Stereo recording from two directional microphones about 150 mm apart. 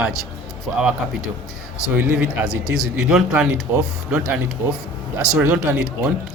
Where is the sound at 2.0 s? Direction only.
10° right (ahead or behind).